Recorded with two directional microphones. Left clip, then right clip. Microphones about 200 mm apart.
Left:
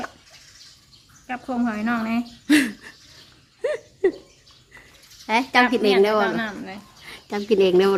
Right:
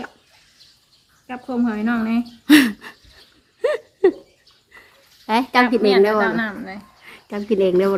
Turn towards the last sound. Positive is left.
turn(degrees=10)  # may be behind; listen again after turning